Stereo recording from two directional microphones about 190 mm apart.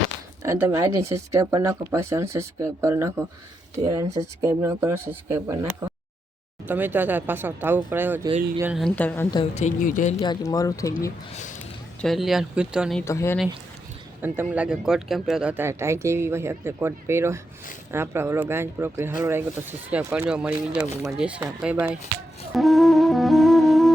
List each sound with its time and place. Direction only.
0.4 s speech: 15° right (ahead or behind)
9.0 s speech: 10° left (ahead or behind)
9.3 s speech: 30° left (ahead or behind)
10.2 s speech: 20° left (ahead or behind)
11.6 s speech: centre (ahead or behind)
13.1 s speech: 15° left (ahead or behind)
14.5 s speech: 5° right (ahead or behind)
22.5 s music: centre (ahead or behind)